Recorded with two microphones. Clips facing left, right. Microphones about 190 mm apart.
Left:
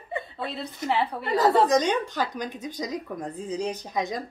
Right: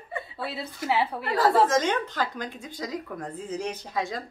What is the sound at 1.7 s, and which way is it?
Speech, 15° left (ahead or behind).